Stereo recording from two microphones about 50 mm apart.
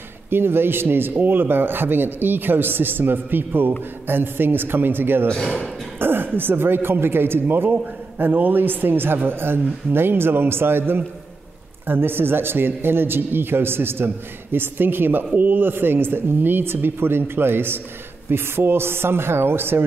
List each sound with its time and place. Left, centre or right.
0.3 s a man's voice: right